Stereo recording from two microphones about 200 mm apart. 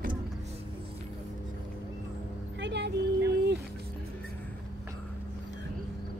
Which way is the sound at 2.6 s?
60° right (ahead or behind).